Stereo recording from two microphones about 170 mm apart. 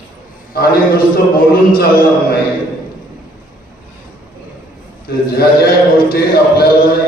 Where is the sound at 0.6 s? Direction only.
60° left (ahead or behind).